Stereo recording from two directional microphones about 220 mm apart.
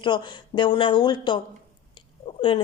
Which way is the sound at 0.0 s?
20° left (ahead or behind).